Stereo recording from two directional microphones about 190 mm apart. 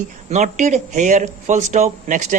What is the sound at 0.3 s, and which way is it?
Speech, 40° right (ahead or behind).